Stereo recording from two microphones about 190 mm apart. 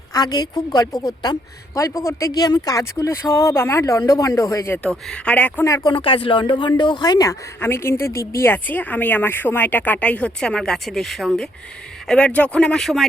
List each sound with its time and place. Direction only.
0.1 s a woman's voice: 20° left (ahead or behind); by 13.1 s centre (ahead or behind)